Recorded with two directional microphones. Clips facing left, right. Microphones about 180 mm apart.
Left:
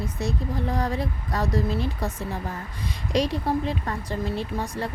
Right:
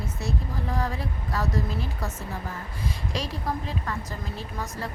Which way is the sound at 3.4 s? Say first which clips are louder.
Left 5 dB; 35° left (ahead or behind).